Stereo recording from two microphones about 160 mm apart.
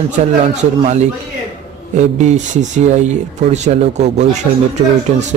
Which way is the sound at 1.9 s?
45° right (ahead or behind).